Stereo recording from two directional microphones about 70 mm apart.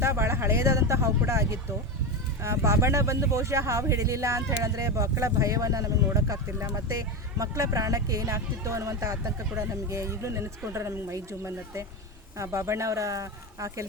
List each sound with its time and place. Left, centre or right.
0.0 s speech: right